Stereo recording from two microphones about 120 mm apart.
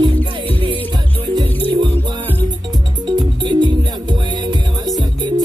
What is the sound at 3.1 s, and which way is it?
Music, 40° right (ahead or behind).